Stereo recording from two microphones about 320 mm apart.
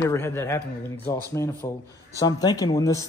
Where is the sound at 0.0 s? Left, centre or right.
Centre.